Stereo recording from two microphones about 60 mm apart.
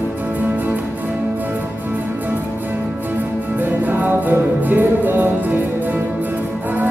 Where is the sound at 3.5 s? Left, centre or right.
Right.